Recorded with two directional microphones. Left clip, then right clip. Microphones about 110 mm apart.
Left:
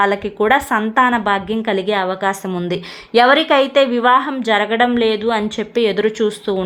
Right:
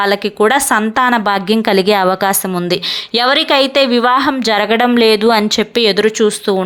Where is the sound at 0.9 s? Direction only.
40° right (ahead or behind).